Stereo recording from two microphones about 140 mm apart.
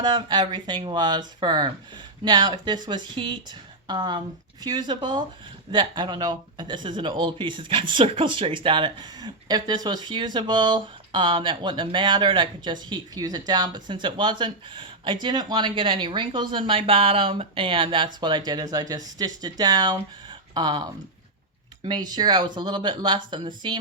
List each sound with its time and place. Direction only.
0.0 s a man's voice: 30° right (ahead or behind)
21.8 s a man's voice: 30° right (ahead or behind)